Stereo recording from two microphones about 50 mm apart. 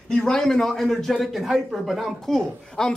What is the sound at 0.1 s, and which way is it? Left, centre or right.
Speech, centre.